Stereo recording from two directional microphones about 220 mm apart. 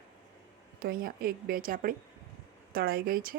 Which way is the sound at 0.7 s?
40° right (ahead or behind).